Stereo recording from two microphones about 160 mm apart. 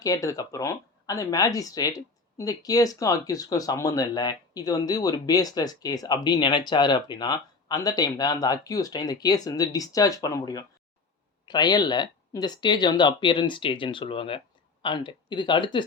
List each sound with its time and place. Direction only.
0.0 s speech: 20° left (ahead or behind)